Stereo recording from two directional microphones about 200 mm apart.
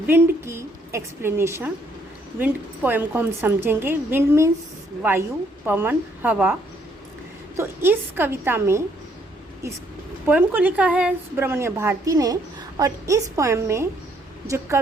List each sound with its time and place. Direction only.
0.1 s a woman's voice: 10° right (ahead or behind)
5.6 s a woman's voice: 10° right (ahead or behind)
10.2 s a woman's voice: 10° right (ahead or behind)